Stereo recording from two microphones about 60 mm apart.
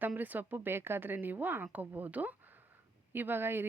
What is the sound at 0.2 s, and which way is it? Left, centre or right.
A woman's voice, right.